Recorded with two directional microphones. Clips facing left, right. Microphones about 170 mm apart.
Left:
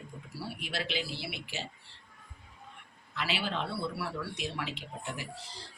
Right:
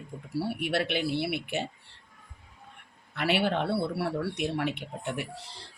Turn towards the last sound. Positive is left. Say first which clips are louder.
# right 6 dB
turn(degrees=-65)  # may be behind; listen again after turning